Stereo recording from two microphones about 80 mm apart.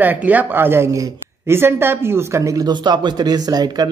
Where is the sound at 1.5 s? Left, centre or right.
Right.